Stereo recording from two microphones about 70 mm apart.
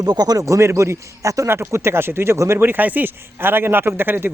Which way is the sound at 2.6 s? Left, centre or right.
Right.